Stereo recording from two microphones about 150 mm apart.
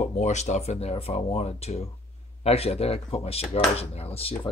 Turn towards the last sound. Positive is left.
turn(degrees=40)  # may be behind; listen again after turning